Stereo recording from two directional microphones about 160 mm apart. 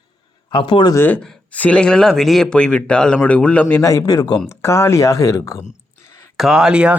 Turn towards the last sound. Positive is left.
turn(degrees=-5)  # may be behind; listen again after turning